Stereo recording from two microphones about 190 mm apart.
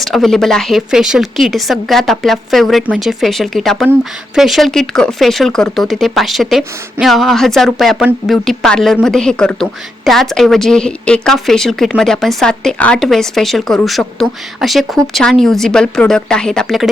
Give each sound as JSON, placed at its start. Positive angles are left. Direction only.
{"t": 0.0, "sound": "speech", "side_deg": 0}